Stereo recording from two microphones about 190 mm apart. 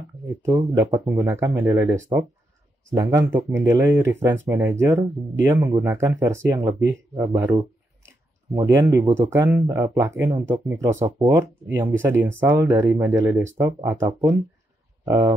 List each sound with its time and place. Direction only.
0.4 s speech: 15° right (ahead or behind)